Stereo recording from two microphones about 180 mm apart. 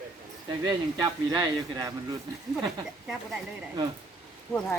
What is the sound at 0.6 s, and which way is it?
Speech, 20° right (ahead or behind).